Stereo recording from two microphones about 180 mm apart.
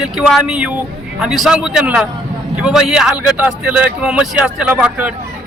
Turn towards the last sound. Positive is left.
turn(degrees=-5)  # may be behind; listen again after turning